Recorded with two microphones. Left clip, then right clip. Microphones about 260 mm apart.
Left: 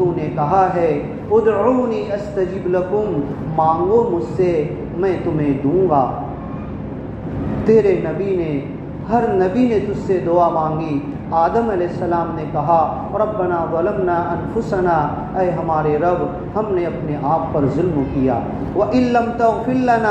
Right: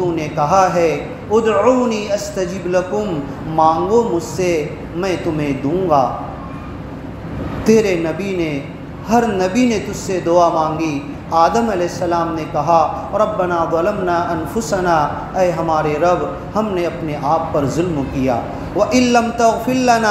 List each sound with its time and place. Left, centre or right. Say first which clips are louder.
0.1 s a man's voice: right 2 dB; right
7.6 s speech: even; right
9.1 s a man's voice: right 1 dB; right